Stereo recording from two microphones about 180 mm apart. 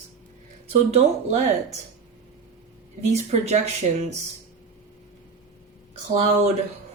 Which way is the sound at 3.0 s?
35° right (ahead or behind).